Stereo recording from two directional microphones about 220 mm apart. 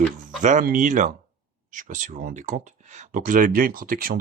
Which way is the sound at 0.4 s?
35° right (ahead or behind).